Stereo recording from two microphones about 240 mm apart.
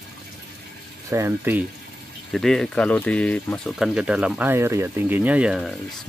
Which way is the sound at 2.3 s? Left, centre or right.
Centre.